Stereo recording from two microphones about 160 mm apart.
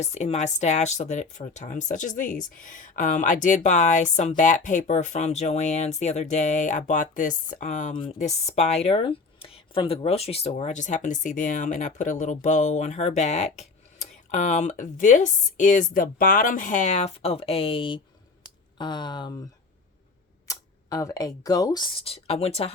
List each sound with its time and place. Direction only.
0.0 s speech: 45° left (ahead or behind)
18.4 s a sound: 30° left (ahead or behind)
20.5 s speech: 20° left (ahead or behind)
22.0 s speech: 40° left (ahead or behind)